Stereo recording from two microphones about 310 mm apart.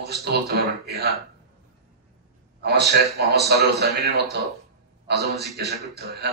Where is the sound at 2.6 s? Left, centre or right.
Right.